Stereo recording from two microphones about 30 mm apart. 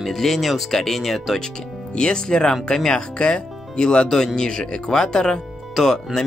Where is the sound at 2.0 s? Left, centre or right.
Left.